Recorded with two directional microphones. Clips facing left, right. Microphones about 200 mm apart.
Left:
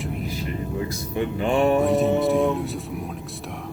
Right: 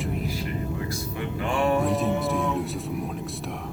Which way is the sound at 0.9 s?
25° left (ahead or behind).